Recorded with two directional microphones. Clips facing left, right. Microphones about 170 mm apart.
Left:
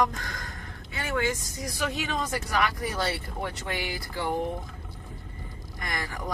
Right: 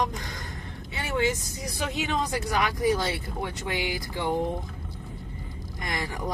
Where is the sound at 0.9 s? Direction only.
20° right (ahead or behind).